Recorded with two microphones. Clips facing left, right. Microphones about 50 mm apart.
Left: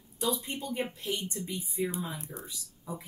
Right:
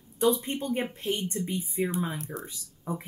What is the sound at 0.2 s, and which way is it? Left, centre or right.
Speech, right.